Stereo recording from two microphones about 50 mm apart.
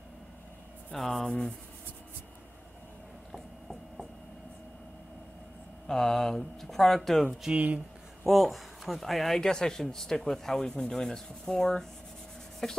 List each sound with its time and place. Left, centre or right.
0.9 s speech: centre
3.3 s a sound: centre
5.9 s speech: centre
7.5 s speech: right
8.3 s speech: centre
9.4 s speech: centre